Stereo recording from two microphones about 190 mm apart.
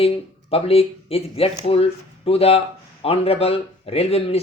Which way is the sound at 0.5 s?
30° left (ahead or behind).